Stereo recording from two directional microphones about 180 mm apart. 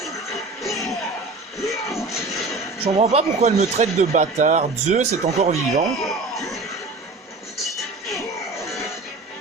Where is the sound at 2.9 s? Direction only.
35° right (ahead or behind).